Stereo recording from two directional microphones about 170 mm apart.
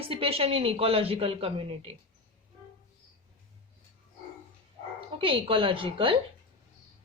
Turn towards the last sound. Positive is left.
turn(degrees=-30)  # may be behind; listen again after turning